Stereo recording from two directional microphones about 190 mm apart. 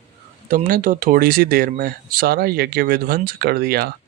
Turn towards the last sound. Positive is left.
turn(degrees=-55)  # may be behind; listen again after turning